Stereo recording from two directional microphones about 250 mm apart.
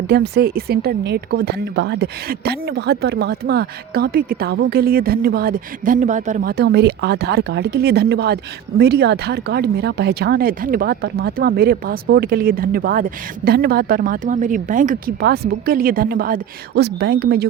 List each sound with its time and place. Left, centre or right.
0.1 s speech: right